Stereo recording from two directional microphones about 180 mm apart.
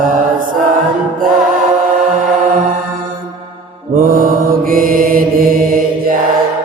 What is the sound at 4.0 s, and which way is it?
Mantra, 50° right (ahead or behind).